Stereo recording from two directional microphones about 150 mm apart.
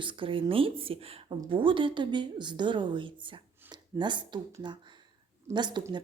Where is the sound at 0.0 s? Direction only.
35° right (ahead or behind).